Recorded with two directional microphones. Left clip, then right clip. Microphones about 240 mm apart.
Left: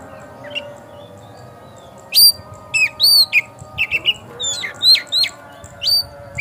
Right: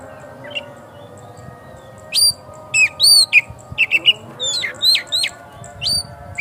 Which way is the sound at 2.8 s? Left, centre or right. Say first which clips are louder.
Even; centre.